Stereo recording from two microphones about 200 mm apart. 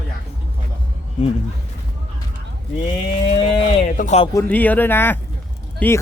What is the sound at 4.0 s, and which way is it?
Speech, 35° left (ahead or behind).